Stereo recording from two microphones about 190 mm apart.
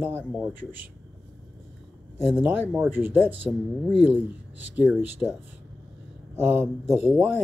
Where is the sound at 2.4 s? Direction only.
10° right (ahead or behind).